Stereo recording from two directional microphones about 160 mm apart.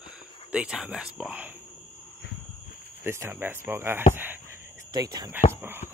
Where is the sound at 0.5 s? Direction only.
5° right (ahead or behind).